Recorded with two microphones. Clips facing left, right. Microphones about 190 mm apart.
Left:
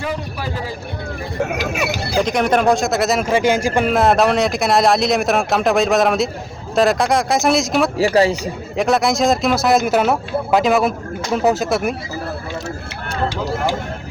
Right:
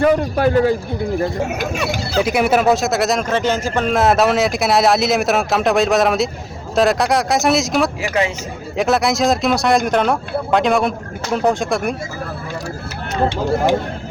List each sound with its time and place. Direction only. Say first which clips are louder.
0.0 s a man's voice: right 10 dB; 60° right (ahead or behind)
2.2 s speech: right 1 dB; 5° right (ahead or behind); by 3.9 s 10° left (ahead or behind)
3.9 s speech: right 1 dB; centre (ahead or behind)
7.9 s a man's voice: left 5 dB; 35° left (ahead or behind)
8.7 s speech: even; centre (ahead or behind)